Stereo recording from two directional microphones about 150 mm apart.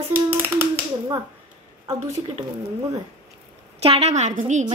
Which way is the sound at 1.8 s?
20° right (ahead or behind).